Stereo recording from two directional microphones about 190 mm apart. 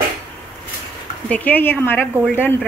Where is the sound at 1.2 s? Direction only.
10° left (ahead or behind).